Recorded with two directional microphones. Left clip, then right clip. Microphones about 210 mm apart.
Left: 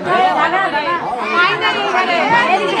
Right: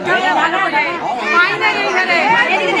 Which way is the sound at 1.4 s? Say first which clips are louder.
Even; 15° right (ahead or behind).